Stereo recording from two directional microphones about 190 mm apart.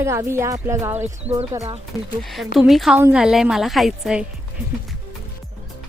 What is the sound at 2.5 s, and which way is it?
A woman's voice, centre (ahead or behind).